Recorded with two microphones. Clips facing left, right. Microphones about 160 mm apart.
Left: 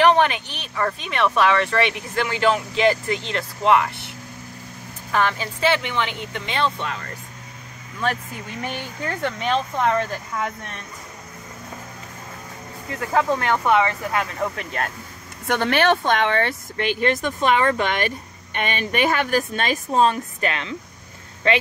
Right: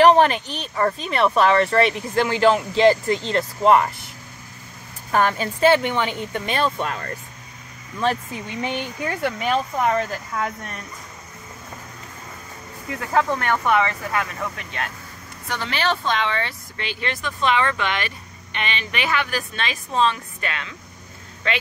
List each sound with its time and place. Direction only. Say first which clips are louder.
0.0 s speech: right 3 dB; 35° right (ahead or behind)
5.1 s speech: right 2 dB; 45° right (ahead or behind)
8.5 s speech: right 3 dB; 20° right (ahead or behind)
13.1 s speech: left 1 dB; 10° left (ahead or behind)
13.7 s speech: left 2 dB; 25° left (ahead or behind)
15.4 s speech: left 6 dB; 55° left (ahead or behind)